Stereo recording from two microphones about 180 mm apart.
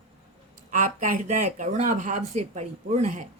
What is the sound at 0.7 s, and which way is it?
Speech, 45° right (ahead or behind).